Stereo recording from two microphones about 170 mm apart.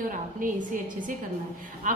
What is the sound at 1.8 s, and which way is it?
Speech, 50° right (ahead or behind).